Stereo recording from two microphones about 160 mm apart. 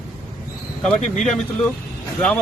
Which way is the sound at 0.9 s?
50° left (ahead or behind).